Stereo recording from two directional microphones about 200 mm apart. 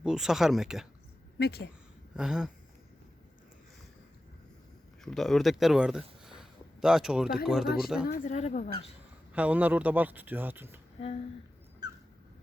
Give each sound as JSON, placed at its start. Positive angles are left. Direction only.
{"t": 0.0, "sound": "speech", "side_deg": 0}
{"t": 1.4, "sound": "a woman's voice", "side_deg": 55}
{"t": 2.1, "sound": "speech", "side_deg": -5}
{"t": 5.0, "sound": "speech", "side_deg": 0}
{"t": 8.0, "sound": "speech", "side_deg": 45}
{"t": 9.3, "sound": "speech", "side_deg": -5}